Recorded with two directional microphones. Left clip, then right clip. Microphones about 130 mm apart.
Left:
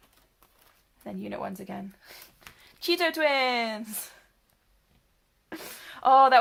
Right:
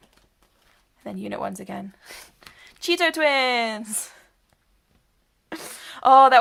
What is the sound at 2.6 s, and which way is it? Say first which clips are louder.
A woman's voice: right 5 dB; 30° right (ahead or behind).